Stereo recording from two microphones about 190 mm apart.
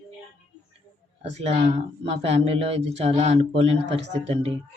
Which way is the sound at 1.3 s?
35° right (ahead or behind).